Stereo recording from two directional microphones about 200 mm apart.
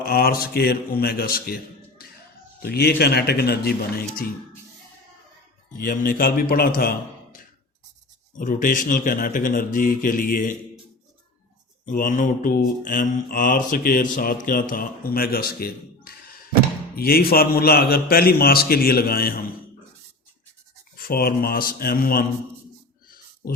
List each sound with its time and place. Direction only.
0.0 s speech: 50° left (ahead or behind)
2.6 s mantra: 50° left (ahead or behind)
5.8 s mantra: 45° left (ahead or behind)
8.4 s mantra: 40° left (ahead or behind)
11.9 s mantra: 40° left (ahead or behind)
20.9 s mantra: 50° left (ahead or behind)